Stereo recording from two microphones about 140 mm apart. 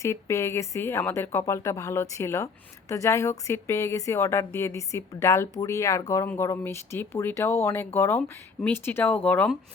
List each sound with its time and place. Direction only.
0.0 s speech: 20° left (ahead or behind)